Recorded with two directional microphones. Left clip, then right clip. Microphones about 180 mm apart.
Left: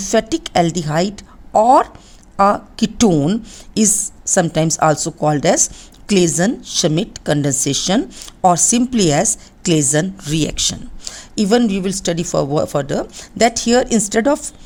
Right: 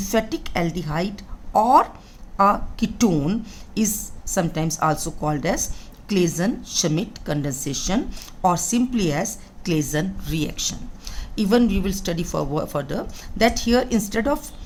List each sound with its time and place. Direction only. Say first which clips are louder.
0.0 s a woman's voice: left 6 dB; 50° left (ahead or behind)